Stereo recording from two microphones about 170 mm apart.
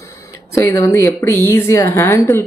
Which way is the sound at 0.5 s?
15° left (ahead or behind).